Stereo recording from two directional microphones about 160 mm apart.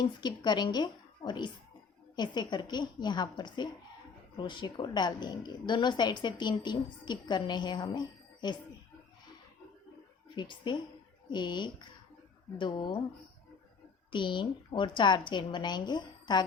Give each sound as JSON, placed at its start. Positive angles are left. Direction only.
{"t": 0.0, "sound": "a woman's voice", "side_deg": 25}
{"t": 10.3, "sound": "a woman's voice", "side_deg": 30}
{"t": 14.1, "sound": "a woman's voice", "side_deg": 30}